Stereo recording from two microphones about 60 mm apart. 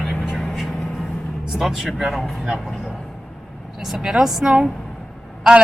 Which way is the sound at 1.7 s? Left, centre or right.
Centre.